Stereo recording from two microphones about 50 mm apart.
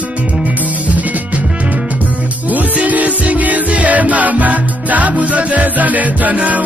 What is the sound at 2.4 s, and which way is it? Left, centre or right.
Music, right.